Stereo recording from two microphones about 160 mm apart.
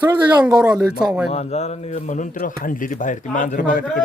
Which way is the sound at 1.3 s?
45° left (ahead or behind).